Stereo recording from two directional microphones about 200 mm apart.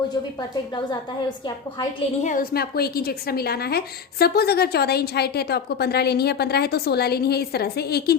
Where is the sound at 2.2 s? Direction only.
45° left (ahead or behind).